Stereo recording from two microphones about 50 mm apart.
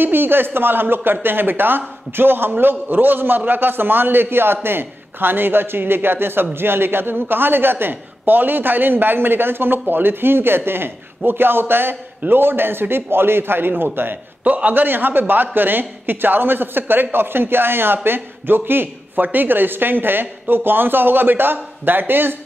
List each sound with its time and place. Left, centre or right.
0.0 s speech: right
14.4 s speech: right